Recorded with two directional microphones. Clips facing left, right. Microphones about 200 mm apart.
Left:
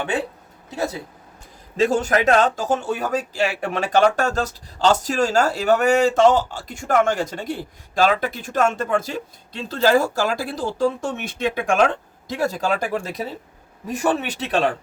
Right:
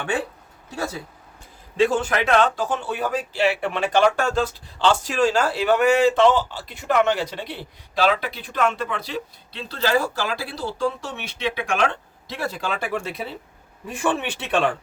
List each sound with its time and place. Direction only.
1.7 s a man's voice: 40° left (ahead or behind)